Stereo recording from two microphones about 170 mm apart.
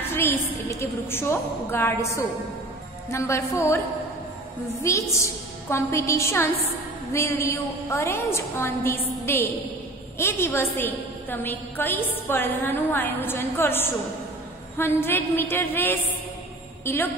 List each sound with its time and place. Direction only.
0.0 s a woman's voice: 15° left (ahead or behind)
4.8 s a woman's voice: 15° left (ahead or behind)